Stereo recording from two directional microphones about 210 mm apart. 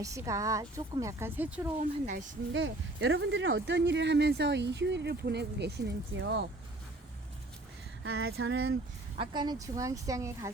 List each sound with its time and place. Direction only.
0.0 s a woman's voice: 15° right (ahead or behind)
2.0 s speech: 35° right (ahead or behind)
2.5 s speech: 65° right (ahead or behind)
8.0 s female singing: 70° right (ahead or behind)
9.1 s a woman's voice: 20° right (ahead or behind)